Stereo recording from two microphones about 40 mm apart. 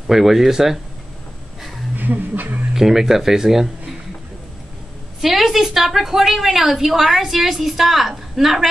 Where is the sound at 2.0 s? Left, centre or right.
Right.